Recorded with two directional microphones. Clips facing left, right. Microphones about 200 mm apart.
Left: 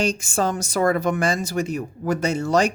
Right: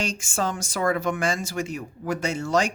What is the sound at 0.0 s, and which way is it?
Speech, 35° left (ahead or behind).